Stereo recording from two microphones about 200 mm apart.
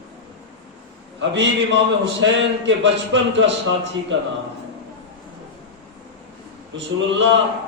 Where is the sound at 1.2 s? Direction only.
65° right (ahead or behind).